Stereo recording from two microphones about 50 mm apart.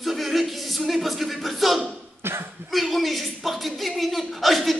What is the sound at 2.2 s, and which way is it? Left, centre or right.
Cough, right.